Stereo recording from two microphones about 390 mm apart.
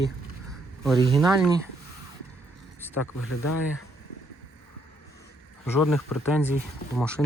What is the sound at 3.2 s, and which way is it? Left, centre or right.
Speech, left.